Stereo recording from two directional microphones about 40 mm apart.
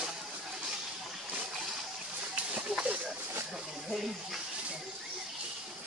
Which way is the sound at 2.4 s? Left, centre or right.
Right.